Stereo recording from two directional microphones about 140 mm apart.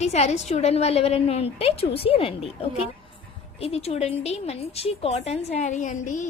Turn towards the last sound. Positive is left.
turn(degrees=60)  # may be behind; listen again after turning